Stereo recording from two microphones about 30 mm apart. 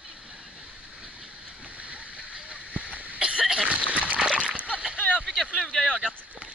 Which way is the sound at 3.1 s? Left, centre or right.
Right.